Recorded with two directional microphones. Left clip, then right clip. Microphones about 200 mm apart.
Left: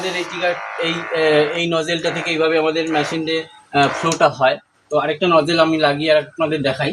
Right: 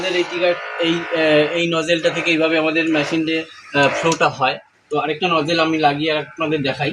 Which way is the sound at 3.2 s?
25° left (ahead or behind).